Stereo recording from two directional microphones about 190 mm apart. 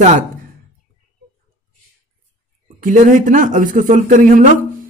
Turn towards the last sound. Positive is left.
turn(degrees=-40)  # may be behind; listen again after turning